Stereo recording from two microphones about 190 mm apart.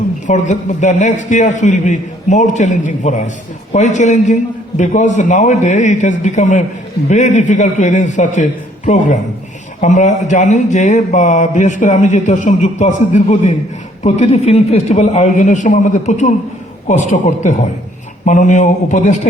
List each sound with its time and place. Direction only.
0.3 s speech: 40° left (ahead or behind)